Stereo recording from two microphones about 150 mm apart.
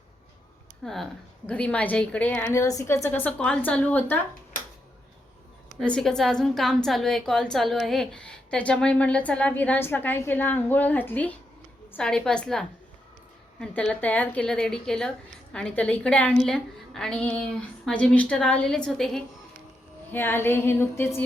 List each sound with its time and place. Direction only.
0.8 s a woman's voice: 5° left (ahead or behind)
5.8 s a woman's voice: 5° left (ahead or behind)
20.1 s a woman's voice: 15° left (ahead or behind)